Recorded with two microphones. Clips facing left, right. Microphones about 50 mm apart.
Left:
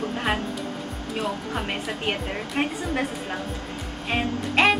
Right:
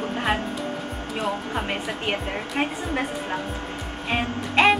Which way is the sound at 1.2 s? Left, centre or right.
Centre.